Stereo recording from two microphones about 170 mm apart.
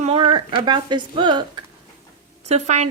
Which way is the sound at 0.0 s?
30° right (ahead or behind).